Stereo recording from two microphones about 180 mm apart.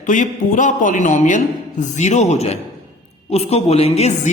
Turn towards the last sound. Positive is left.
turn(degrees=35)  # may be behind; listen again after turning